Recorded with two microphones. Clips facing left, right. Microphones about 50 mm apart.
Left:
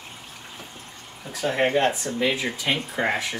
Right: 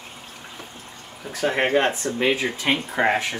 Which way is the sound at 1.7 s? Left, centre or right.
Right.